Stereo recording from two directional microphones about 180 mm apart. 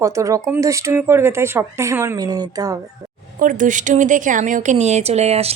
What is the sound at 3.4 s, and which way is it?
Speech, 45° right (ahead or behind).